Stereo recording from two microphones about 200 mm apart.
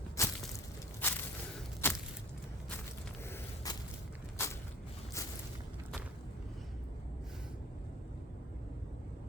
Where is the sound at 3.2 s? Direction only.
15° left (ahead or behind).